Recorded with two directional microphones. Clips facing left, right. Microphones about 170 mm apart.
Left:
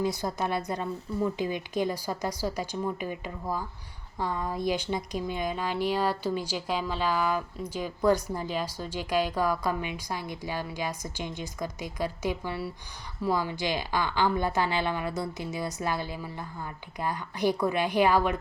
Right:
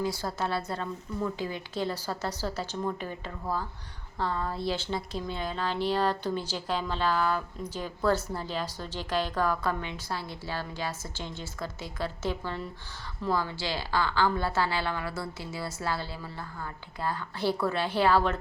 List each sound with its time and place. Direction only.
0.0 s a woman's voice: 20° left (ahead or behind)